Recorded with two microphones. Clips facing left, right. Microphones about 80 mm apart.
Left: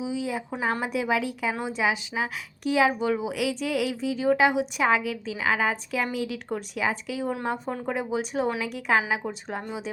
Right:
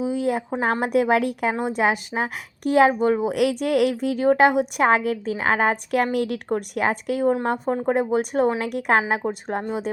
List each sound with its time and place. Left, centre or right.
0.0 s a sound: right
0.6 s a woman's voice: right
7.7 s speech: right
7.9 s a woman's voice: right
9.0 s a woman's voice: right